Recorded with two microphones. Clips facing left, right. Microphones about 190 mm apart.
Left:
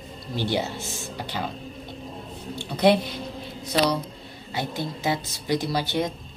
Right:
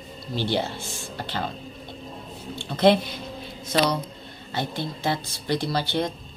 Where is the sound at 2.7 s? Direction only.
15° left (ahead or behind).